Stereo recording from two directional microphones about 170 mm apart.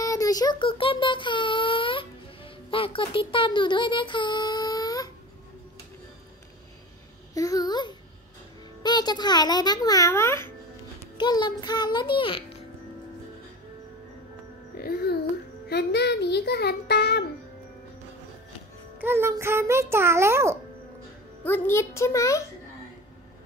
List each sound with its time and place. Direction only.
0.0 s child singing: 20° left (ahead or behind)
7.3 s babbling: 20° left (ahead or behind)
8.8 s a child's voice: 25° left (ahead or behind)
11.1 s a child's voice: 25° left (ahead or behind)
14.8 s a child's voice: 65° left (ahead or behind)
15.7 s speech: 80° left
18.9 s a child's voice: 15° right (ahead or behind)
21.5 s a child's voice: 15° left (ahead or behind)